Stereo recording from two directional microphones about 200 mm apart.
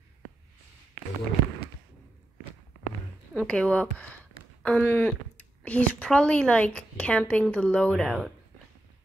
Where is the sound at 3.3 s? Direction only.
Centre (ahead or behind).